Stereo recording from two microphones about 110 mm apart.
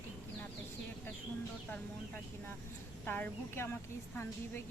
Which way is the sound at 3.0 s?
15° left (ahead or behind).